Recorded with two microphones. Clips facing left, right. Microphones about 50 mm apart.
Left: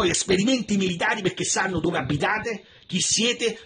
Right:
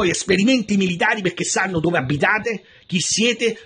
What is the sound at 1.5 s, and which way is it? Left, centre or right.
Speech, right.